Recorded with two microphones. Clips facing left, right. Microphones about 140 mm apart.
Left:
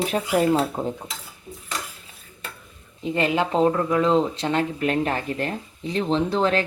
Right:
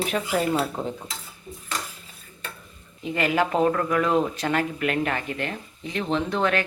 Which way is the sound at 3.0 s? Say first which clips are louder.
Left 1 dB; 30° left (ahead or behind).